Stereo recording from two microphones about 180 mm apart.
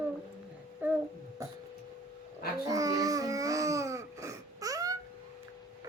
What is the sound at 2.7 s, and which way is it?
Baby cry, 20° right (ahead or behind).